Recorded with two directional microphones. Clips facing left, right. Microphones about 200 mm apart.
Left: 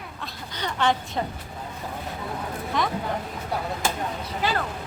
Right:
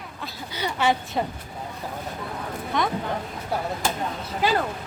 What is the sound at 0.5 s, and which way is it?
Speech, 10° right (ahead or behind).